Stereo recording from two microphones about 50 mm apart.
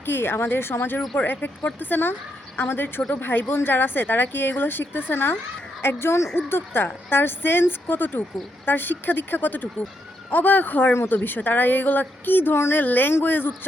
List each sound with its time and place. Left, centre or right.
0.0 s a woman's voice: left
1.1 s a woman's voice: left
5.8 s speech: left
6.3 s a woman's voice: left
12.5 s speech: left
12.8 s a woman's voice: left